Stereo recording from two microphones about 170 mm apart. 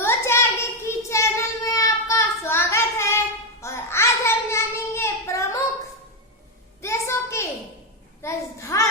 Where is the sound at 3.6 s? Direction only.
15° left (ahead or behind).